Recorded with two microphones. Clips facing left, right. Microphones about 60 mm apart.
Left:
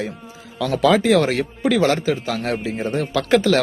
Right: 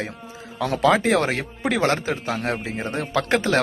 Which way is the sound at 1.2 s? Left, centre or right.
Right.